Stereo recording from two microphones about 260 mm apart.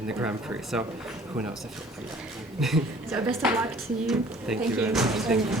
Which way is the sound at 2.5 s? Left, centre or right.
Centre.